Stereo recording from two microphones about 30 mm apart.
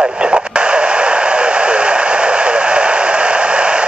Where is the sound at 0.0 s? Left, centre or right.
Right.